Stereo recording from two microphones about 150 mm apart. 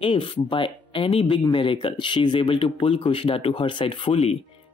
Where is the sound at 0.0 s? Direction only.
35° left (ahead or behind).